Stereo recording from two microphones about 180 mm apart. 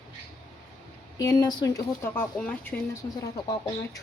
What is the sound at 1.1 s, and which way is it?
A woman's voice, 20° left (ahead or behind).